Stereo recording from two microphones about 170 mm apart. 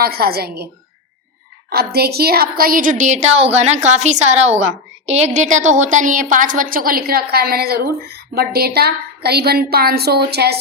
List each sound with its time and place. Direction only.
0.0 s a woman's voice: 65° right (ahead or behind)
1.7 s a woman's voice: 65° right (ahead or behind)